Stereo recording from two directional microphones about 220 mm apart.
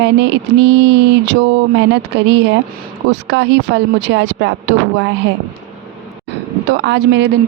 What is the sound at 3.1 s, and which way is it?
A woman's voice, 55° right (ahead or behind).